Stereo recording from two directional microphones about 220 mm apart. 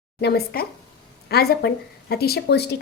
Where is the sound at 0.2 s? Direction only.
45° left (ahead or behind).